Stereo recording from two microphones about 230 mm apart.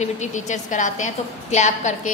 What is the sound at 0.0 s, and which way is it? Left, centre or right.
A woman's voice, left.